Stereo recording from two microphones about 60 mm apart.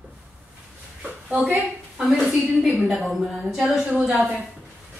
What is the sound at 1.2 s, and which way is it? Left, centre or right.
A woman's voice, centre.